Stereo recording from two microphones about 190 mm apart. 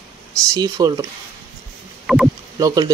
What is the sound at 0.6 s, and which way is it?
Speech, 20° right (ahead or behind).